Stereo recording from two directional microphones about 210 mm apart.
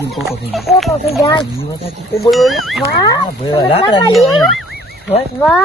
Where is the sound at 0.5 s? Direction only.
Centre (ahead or behind).